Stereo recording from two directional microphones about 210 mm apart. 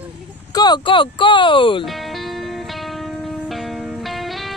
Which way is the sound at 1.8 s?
Centre (ahead or behind).